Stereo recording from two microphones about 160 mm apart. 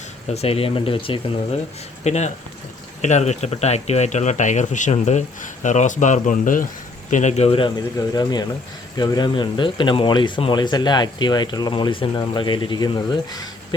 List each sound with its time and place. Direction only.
0.3 s speech: 40° left (ahead or behind)
2.0 s speech: 45° left (ahead or behind)
7.9 s speech: 25° left (ahead or behind)
13.3 s a sound: 25° left (ahead or behind)